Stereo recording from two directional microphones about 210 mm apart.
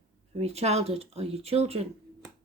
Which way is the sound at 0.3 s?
30° right (ahead or behind).